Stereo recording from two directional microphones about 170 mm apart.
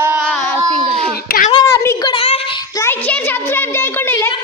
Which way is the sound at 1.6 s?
20° left (ahead or behind).